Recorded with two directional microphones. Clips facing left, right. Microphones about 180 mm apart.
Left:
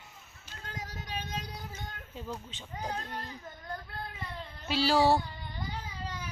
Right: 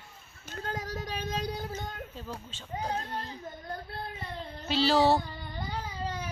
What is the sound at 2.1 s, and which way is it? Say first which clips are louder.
Speech: left 1 dB; 15° left (ahead or behind).